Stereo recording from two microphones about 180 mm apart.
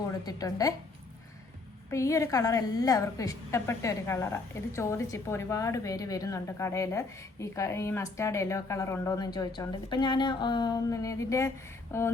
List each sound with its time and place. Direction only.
0.3 s a woman's voice: 20° left (ahead or behind)
1.9 s a woman's voice: 15° left (ahead or behind)